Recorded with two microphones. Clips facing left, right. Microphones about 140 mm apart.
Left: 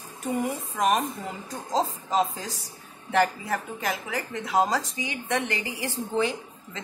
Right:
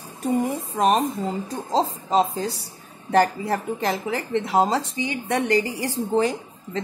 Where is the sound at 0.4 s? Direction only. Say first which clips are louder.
Right 2 dB; 30° right (ahead or behind).